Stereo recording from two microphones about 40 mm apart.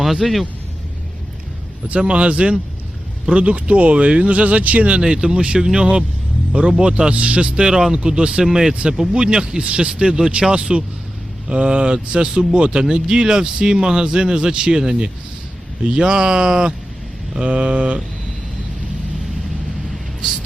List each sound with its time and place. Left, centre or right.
0.0 s speech: centre
1.9 s speech: right
17.4 s speech: right